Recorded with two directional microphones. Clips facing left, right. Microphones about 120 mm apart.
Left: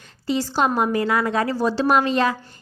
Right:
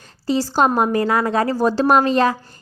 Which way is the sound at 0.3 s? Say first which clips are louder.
Right 4 dB; 40° right (ahead or behind).